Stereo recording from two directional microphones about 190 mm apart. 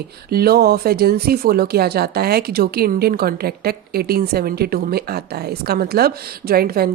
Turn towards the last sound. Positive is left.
turn(degrees=-55)  # may be behind; listen again after turning